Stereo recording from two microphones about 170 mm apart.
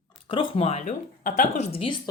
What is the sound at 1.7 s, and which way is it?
Speech, 35° left (ahead or behind).